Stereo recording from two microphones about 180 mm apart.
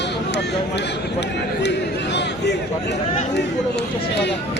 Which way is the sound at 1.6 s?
70° left (ahead or behind).